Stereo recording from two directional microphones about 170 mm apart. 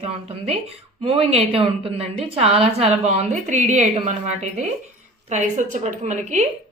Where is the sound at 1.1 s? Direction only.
35° right (ahead or behind).